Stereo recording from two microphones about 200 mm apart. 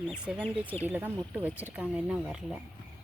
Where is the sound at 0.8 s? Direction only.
10° right (ahead or behind).